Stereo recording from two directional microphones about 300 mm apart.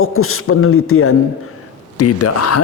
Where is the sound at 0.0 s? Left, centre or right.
Left.